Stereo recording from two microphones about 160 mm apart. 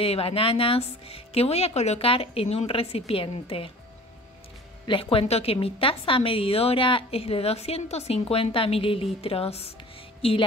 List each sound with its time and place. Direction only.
0.0 s a woman's voice: 35° left (ahead or behind)
4.8 s a woman's voice: 35° left (ahead or behind)